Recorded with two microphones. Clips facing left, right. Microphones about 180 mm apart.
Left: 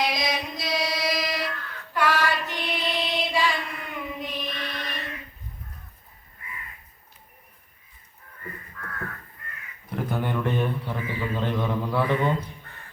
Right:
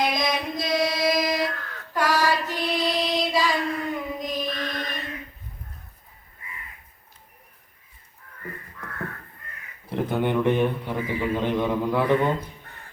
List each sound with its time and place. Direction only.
0.0 s chant: 50° right (ahead or behind)
9.8 s a man's voice: 25° right (ahead or behind)